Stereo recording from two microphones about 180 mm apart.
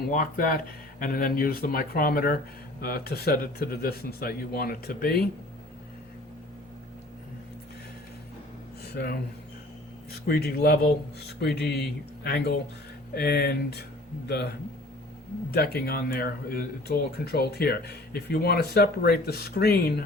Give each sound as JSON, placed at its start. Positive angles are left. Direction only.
{"t": 0.1, "sound": "speech", "side_deg": 50}
{"t": 9.0, "sound": "speech", "side_deg": 60}
{"t": 10.2, "sound": "speech", "side_deg": 60}
{"t": 15.5, "sound": "speech", "side_deg": 60}